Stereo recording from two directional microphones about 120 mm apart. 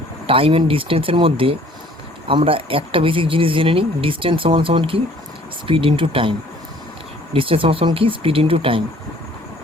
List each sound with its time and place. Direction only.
0.3 s speech: 50° right (ahead or behind)
7.3 s speech: 50° right (ahead or behind)